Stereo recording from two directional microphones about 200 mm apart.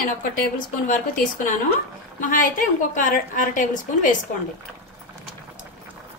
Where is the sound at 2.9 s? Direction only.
40° left (ahead or behind).